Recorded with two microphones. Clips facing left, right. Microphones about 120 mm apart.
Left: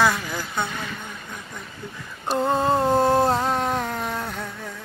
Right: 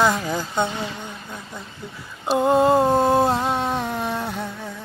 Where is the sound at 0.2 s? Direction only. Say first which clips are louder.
Right 5 dB; 25° right (ahead or behind).